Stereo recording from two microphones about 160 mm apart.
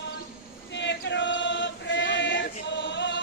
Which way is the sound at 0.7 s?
90° left.